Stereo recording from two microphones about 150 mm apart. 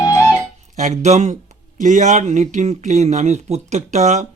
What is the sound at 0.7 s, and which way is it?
Speech, 55° right (ahead or behind).